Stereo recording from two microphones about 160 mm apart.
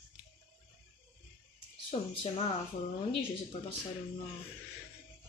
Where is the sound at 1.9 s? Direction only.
35° left (ahead or behind).